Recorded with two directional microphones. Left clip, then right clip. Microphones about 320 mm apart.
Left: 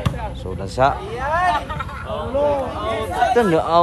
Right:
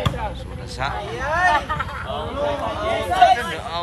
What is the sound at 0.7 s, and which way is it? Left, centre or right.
Speech, centre.